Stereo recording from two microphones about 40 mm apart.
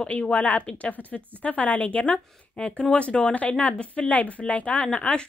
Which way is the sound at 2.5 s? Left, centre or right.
Left.